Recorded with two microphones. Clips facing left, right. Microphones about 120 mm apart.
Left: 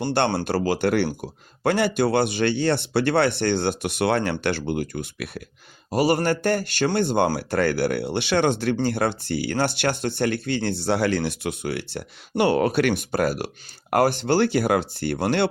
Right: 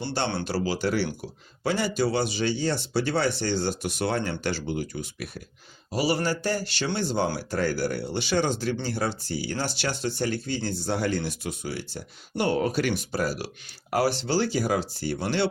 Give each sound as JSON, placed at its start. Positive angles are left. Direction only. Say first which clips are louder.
{"t": 0.0, "sound": "speech", "louder": "left 7 dB", "side_deg": 60}
{"t": 0.3, "sound": "speech", "louder": "left 5 dB", "side_deg": 45}
{"t": 5.9, "sound": "speech", "louder": "left 5 dB", "side_deg": 50}